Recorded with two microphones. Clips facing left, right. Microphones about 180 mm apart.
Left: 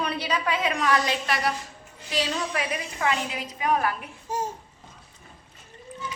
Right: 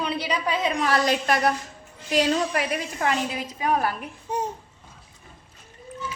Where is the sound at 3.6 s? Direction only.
40° right (ahead or behind).